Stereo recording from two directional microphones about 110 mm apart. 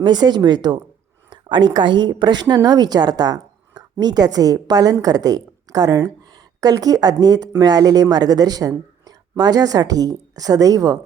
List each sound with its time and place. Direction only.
0.0 s a woman's voice: 40° right (ahead or behind)